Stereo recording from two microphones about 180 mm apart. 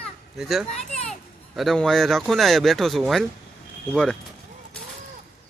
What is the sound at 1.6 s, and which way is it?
Speech, centre (ahead or behind).